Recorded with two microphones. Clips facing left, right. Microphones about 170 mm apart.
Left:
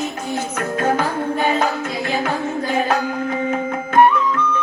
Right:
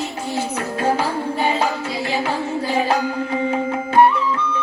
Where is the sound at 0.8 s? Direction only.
30° right (ahead or behind).